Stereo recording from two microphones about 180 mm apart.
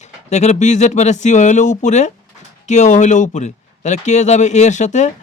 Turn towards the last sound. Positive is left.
turn(degrees=40)  # may be behind; listen again after turning